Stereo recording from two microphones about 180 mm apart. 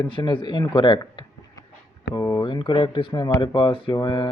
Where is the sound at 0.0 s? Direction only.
25° left (ahead or behind).